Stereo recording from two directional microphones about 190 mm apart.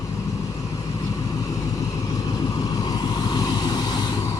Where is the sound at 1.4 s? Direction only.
20° left (ahead or behind).